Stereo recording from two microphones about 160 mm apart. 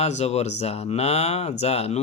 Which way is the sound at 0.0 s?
45° left (ahead or behind).